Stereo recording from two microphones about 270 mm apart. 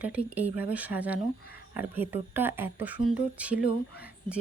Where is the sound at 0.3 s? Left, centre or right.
Centre.